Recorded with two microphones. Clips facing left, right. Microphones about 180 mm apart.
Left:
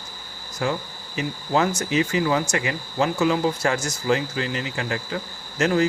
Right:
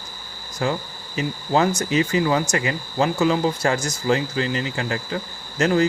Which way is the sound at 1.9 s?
35° right (ahead or behind).